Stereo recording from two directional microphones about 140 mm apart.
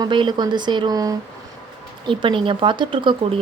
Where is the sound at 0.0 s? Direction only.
35° right (ahead or behind).